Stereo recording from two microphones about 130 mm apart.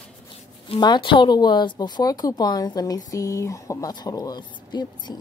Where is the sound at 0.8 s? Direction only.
35° left (ahead or behind).